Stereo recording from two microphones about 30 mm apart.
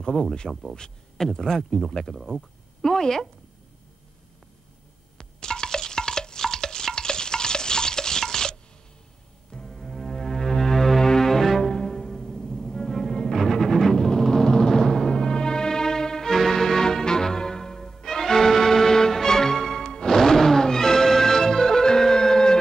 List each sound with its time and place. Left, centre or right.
0.1 s speech: left
5.1 s stir: left
9.5 s music: left
9.8 s music: centre
13.9 s timpani: left
16.3 s music: centre